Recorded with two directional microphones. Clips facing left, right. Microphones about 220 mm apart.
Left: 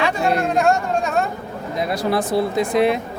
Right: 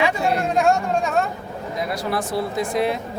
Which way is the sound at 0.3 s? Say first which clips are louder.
Left 1 dB; 5° right (ahead or behind).